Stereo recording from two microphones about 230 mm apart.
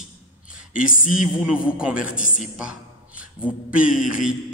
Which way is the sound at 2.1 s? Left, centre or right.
Left.